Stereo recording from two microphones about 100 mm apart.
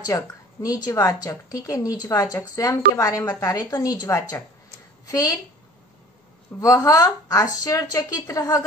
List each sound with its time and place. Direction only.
0.0 s a woman's voice: 35° left (ahead or behind)
6.6 s speech: 35° left (ahead or behind)